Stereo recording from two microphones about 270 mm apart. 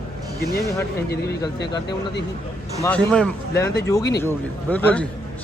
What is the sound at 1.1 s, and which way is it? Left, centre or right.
Speech, left.